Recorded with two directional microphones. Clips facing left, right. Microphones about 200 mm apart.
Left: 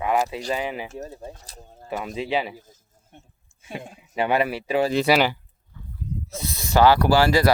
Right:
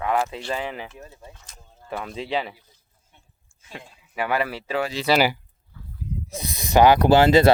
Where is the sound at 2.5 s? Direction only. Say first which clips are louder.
Left 13 dB; 45° left (ahead or behind).